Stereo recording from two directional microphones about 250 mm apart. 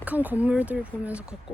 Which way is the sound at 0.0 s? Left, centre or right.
Centre.